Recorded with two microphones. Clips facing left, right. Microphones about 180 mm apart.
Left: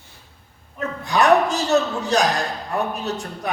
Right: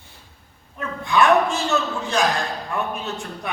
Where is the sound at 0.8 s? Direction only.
40° left (ahead or behind).